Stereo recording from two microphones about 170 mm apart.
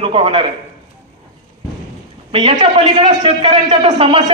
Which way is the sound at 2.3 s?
30° right (ahead or behind).